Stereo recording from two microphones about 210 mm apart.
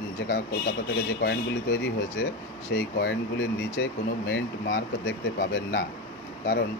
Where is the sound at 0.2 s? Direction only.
55° left (ahead or behind).